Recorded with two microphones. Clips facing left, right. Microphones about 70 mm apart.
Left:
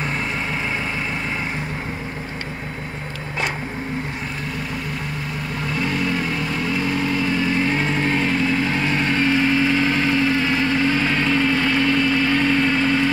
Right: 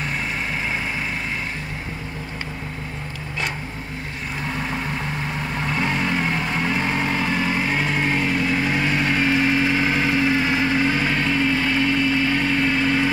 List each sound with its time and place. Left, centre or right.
5.8 s vehicle: right
7.7 s vehicle: centre